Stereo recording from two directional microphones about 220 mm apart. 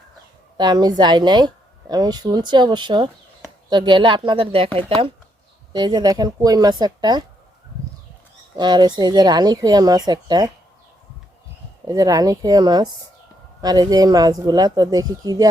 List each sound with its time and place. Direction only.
0.5 s a woman's voice: 20° right (ahead or behind)
8.5 s a woman's voice: 20° right (ahead or behind)
11.9 s speech: 15° right (ahead or behind)